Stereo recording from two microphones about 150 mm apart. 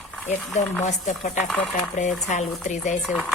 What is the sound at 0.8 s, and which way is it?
A woman's voice, 50° left (ahead or behind).